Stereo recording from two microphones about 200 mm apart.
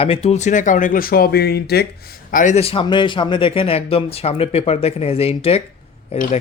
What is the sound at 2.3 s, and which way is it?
Speech, 35° left (ahead or behind).